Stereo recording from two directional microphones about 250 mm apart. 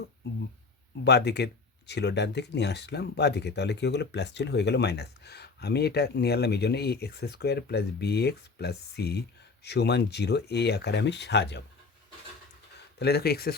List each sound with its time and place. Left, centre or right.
1.0 s speech: left
13.0 s speech: left